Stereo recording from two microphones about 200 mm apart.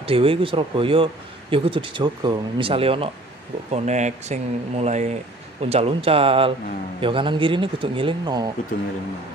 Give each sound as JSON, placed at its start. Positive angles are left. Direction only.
{"t": 0.0, "sound": "speech", "side_deg": -25}